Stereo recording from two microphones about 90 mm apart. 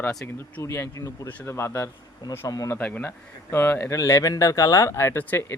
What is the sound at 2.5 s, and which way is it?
Speech, 40° left (ahead or behind).